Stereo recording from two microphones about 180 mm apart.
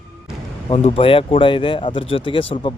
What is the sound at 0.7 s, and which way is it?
Speech, 30° left (ahead or behind).